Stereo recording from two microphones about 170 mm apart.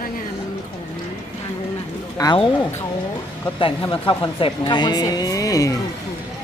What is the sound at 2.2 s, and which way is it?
Speech, 20° left (ahead or behind).